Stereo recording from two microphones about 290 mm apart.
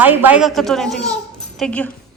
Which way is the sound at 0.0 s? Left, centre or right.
Centre.